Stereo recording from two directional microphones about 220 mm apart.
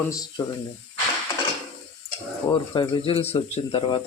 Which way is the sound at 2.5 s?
20° left (ahead or behind).